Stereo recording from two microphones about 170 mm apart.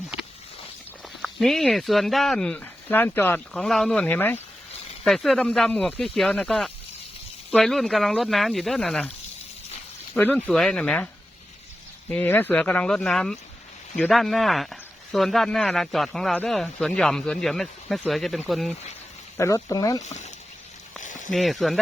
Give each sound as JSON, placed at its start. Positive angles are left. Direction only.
{"t": 1.2, "sound": "speech", "side_deg": 0}
{"t": 10.2, "sound": "speech", "side_deg": 10}
{"t": 19.4, "sound": "speech", "side_deg": 20}
{"t": 20.0, "sound": "speech", "side_deg": 45}
{"t": 21.0, "sound": "a sound", "side_deg": 45}
{"t": 21.3, "sound": "speech", "side_deg": 0}